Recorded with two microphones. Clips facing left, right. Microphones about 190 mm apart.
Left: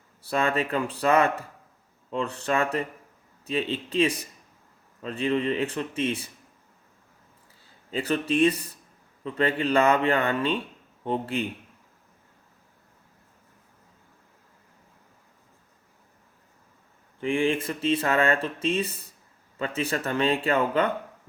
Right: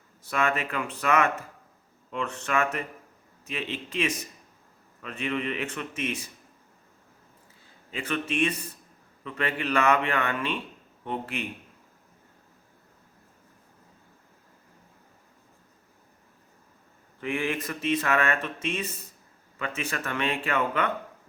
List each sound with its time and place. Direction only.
0.2 s speech: 35° left (ahead or behind)
7.9 s speech: 35° left (ahead or behind)
17.2 s speech: 30° left (ahead or behind)